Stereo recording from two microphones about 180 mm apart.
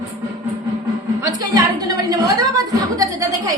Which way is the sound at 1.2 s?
20° right (ahead or behind).